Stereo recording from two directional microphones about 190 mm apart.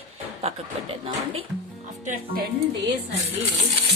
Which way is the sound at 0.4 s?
30° right (ahead or behind).